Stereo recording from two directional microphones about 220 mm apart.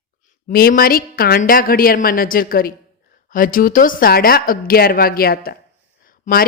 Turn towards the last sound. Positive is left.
turn(degrees=40)  # may be behind; listen again after turning